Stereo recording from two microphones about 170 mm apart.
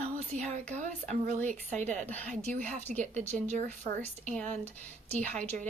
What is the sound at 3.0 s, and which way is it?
Speech, 10° left (ahead or behind).